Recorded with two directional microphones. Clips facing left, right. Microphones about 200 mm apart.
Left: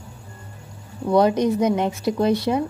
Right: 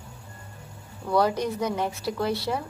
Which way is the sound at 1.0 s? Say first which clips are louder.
Left 6 dB; 20° left (ahead or behind).